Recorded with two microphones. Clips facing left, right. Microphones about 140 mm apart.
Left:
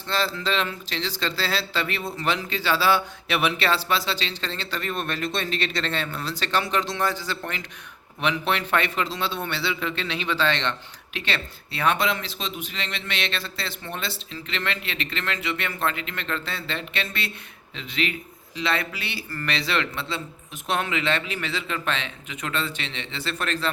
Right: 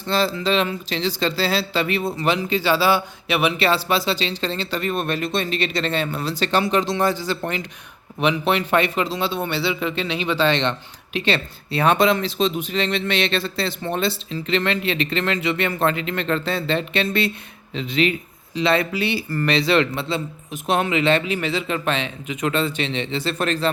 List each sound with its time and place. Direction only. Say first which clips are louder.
0.0 s a man's voice: right 5 dB; 10° right (ahead or behind)